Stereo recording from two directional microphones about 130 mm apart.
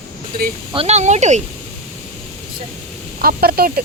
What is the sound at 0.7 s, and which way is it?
Speech, 55° right (ahead or behind).